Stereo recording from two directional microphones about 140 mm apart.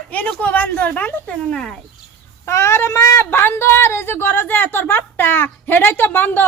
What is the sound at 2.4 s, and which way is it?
Speech, 20° left (ahead or behind).